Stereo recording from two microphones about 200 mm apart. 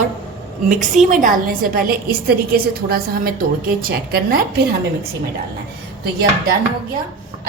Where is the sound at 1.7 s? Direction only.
50° right (ahead or behind).